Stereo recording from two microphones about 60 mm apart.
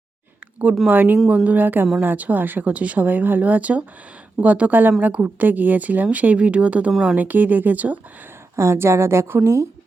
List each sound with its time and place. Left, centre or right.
0.9 s speech: right
8.5 s a woman's voice: right